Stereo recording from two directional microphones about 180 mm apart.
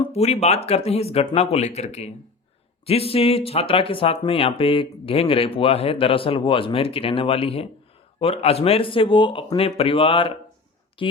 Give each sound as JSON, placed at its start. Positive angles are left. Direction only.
{"t": 0.0, "sound": "a woman's voice", "side_deg": 35}